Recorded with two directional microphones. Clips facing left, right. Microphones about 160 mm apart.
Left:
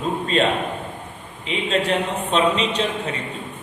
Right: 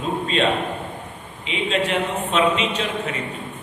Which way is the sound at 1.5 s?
35° left (ahead or behind).